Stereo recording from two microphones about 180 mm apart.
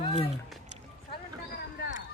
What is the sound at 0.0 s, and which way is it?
Music, 30° left (ahead or behind).